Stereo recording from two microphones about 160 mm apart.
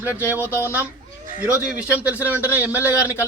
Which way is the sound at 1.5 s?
10° right (ahead or behind).